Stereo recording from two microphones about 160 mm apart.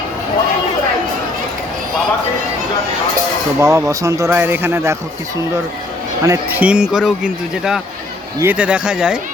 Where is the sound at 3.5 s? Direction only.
15° right (ahead or behind).